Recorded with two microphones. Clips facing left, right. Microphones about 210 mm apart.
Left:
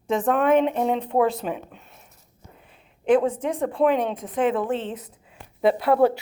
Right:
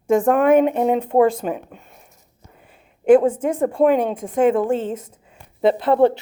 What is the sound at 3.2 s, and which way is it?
Speech, 45° right (ahead or behind).